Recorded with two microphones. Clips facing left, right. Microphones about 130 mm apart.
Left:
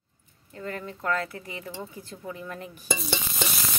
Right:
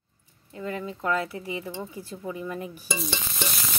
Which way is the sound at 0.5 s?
10° right (ahead or behind).